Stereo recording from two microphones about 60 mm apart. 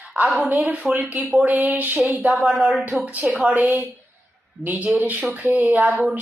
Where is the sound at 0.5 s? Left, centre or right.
Right.